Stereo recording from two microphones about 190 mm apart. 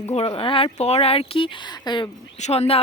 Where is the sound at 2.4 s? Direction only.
35° left (ahead or behind).